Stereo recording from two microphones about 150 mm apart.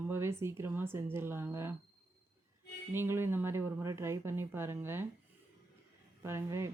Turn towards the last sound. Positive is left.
turn(degrees=-20)  # may be behind; listen again after turning